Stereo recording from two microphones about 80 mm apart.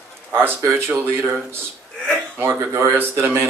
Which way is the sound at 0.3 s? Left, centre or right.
Right.